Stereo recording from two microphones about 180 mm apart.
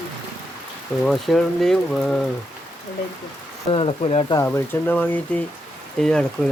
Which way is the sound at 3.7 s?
30° left (ahead or behind).